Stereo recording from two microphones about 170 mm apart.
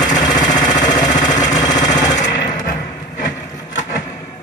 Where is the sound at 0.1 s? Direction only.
45° left (ahead or behind).